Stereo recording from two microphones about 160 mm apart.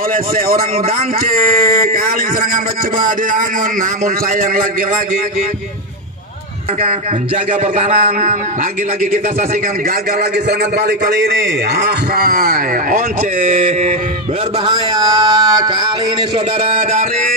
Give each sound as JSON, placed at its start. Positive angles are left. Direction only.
{"t": 3.1, "sound": "a man's voice", "side_deg": -55}
{"t": 7.6, "sound": "a sound", "side_deg": -45}
{"t": 10.6, "sound": "a man's voice", "side_deg": -90}
{"t": 14.7, "sound": "music", "side_deg": -25}
{"t": 16.6, "sound": "a man's voice", "side_deg": -55}